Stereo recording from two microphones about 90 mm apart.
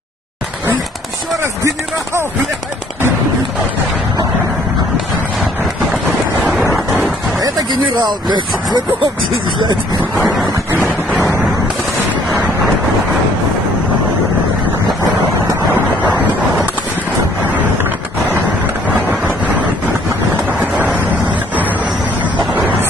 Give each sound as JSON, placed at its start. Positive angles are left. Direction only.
{"t": 7.3, "sound": "a sound", "side_deg": -45}
{"t": 8.0, "sound": "speech", "side_deg": -55}
{"t": 9.0, "sound": "vehicle", "side_deg": -70}
{"t": 18.9, "sound": "vehicle", "side_deg": -15}
{"t": 20.4, "sound": "a sound", "side_deg": -20}
{"t": 22.2, "sound": "vehicle", "side_deg": -15}